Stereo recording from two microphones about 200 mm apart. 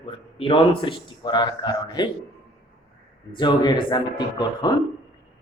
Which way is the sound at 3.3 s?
25° left (ahead or behind).